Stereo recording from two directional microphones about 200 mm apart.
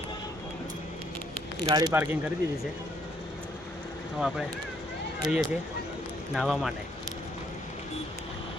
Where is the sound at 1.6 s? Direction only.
15° right (ahead or behind).